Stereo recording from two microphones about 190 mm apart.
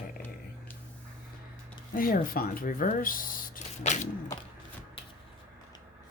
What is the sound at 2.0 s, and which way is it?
Speech, 50° left (ahead or behind).